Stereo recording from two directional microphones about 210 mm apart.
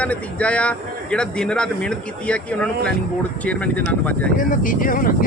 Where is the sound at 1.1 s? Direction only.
5° left (ahead or behind).